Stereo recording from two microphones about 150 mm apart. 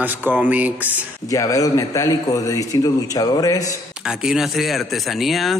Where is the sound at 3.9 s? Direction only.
5° right (ahead or behind).